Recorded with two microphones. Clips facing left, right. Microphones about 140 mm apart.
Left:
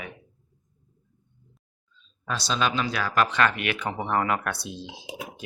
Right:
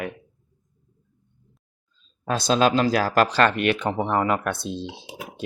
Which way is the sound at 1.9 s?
45° right (ahead or behind).